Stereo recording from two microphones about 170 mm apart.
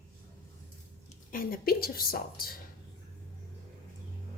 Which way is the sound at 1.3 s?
60° left (ahead or behind).